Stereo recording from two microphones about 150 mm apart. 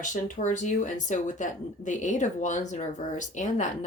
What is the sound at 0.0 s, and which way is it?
Speech, 60° left (ahead or behind).